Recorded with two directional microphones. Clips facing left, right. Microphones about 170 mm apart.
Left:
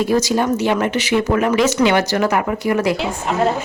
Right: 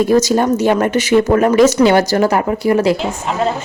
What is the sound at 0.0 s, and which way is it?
Speech, 45° right (ahead or behind).